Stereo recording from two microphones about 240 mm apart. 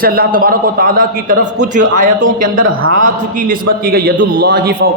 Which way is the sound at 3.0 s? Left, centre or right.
Right.